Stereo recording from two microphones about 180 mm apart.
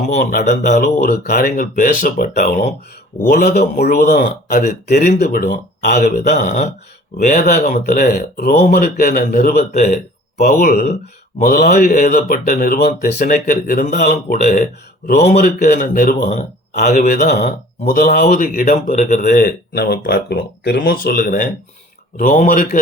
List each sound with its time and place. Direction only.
0.0 s speech: 45° left (ahead or behind)
0.9 s speech: 60° left (ahead or behind)
3.6 s speech: 60° left (ahead or behind)
9.0 s speech: 50° left (ahead or behind)
9.7 s speech: 40° left (ahead or behind)
10.3 s speech: 55° left (ahead or behind); by 17.0 s 40° left (ahead or behind)
17.0 s speech: 60° left (ahead or behind)